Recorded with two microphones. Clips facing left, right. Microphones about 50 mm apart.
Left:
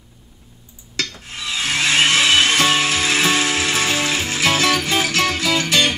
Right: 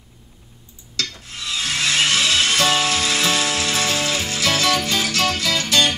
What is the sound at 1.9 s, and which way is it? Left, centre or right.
Music, left.